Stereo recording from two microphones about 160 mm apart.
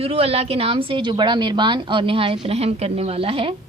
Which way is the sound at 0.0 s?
40° right (ahead or behind).